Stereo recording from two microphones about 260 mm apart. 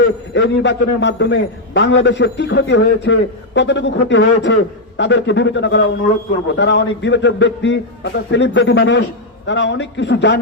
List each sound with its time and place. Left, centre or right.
0.3 s a man's voice: left